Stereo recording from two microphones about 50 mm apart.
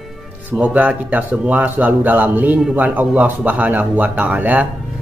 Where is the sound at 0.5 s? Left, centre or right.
Right.